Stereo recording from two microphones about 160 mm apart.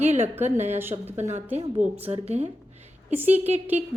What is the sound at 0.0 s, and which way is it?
Speech, 45° right (ahead or behind).